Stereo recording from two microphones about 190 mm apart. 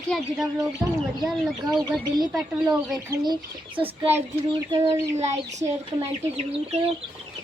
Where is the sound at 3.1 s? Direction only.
20° right (ahead or behind).